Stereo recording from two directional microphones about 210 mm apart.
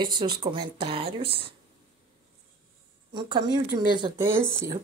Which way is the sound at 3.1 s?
20° right (ahead or behind).